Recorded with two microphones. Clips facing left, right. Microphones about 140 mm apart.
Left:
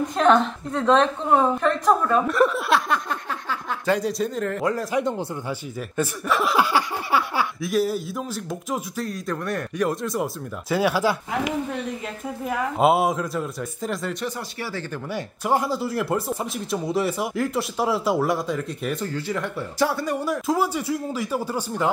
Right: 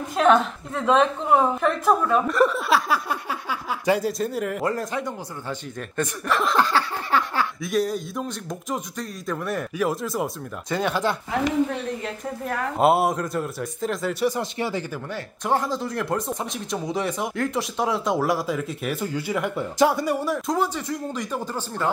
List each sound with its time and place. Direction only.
0.1 s speech: 5° right (ahead or behind)
14.2 s speech: 15° right (ahead or behind)
15.0 s speech: 10° left (ahead or behind); by 20.2 s 15° right (ahead or behind)
20.2 s speech: centre (ahead or behind)